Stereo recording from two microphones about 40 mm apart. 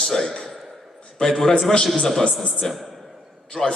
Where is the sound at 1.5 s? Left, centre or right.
Left.